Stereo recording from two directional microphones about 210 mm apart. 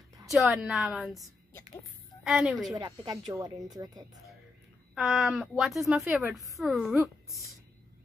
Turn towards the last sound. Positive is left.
turn(degrees=0)  # may be behind; listen again after turning